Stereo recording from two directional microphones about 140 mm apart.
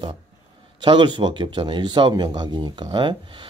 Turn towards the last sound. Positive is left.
turn(degrees=-35)  # may be behind; listen again after turning